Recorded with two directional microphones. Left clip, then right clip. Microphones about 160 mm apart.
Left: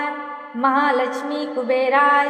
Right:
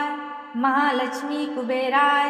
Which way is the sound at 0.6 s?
25° left (ahead or behind).